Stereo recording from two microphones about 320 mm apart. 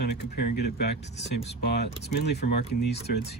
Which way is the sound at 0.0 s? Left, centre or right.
Left.